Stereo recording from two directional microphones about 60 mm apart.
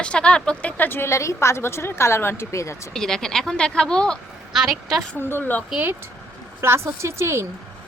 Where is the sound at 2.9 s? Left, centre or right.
Centre.